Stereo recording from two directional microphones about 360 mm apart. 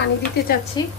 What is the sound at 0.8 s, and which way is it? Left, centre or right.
Speech, centre.